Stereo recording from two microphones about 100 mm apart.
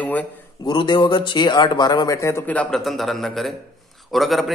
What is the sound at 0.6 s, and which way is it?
Speech, 50° left (ahead or behind).